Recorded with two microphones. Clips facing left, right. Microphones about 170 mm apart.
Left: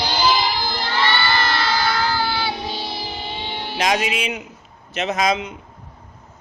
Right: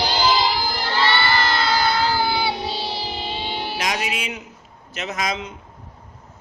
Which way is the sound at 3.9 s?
20° left (ahead or behind).